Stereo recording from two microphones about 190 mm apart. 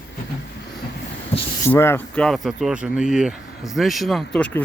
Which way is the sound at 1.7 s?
10° left (ahead or behind).